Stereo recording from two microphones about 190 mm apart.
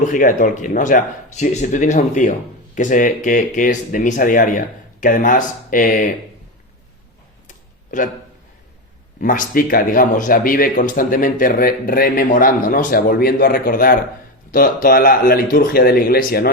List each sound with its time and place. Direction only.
0.0 s speech: 45° left (ahead or behind)
7.4 s a sound: 45° left (ahead or behind)
9.2 s speech: 45° left (ahead or behind)